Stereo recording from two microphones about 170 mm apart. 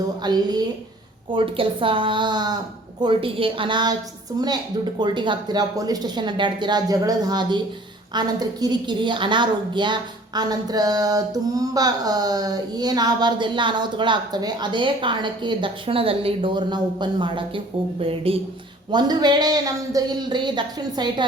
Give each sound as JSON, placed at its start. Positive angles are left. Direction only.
{"t": 0.2, "sound": "a woman's voice", "side_deg": -25}
{"t": 4.9, "sound": "a woman's voice", "side_deg": -25}